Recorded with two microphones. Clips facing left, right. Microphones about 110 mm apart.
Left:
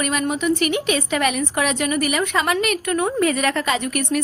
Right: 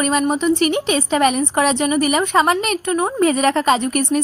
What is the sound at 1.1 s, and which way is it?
A woman's voice, 30° right (ahead or behind).